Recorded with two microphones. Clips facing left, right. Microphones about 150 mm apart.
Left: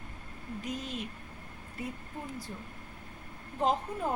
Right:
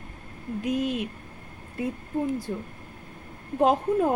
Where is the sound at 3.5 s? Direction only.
55° right (ahead or behind).